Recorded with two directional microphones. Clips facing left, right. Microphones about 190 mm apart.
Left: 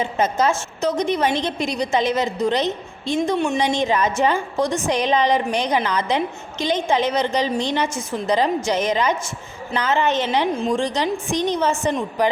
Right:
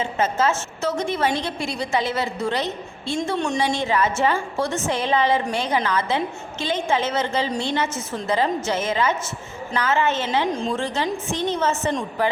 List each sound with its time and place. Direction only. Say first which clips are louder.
0.0 s a woman's voice: left 2 dB; 15° left (ahead or behind)